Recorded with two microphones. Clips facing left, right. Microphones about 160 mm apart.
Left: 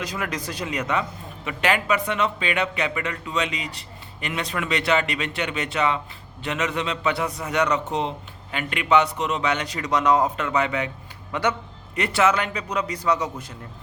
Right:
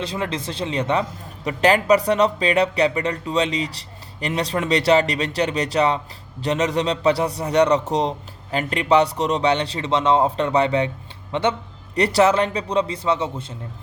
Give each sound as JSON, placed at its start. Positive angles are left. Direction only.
{"t": 0.0, "sound": "speech", "side_deg": -30}
{"t": 11.9, "sound": "speech", "side_deg": -35}